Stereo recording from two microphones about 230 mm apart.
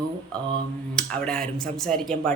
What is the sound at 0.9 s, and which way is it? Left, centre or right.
Speech, centre.